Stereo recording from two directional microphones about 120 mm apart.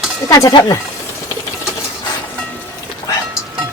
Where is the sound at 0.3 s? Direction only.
30° left (ahead or behind).